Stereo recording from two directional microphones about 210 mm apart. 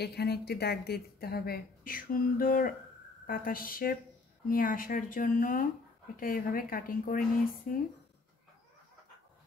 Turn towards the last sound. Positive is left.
turn(degrees=40)  # may be behind; listen again after turning